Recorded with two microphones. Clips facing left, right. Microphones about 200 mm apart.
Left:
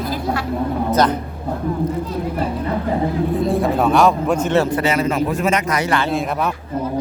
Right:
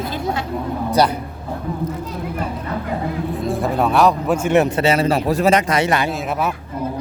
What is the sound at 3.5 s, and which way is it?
A man's voice, centre (ahead or behind).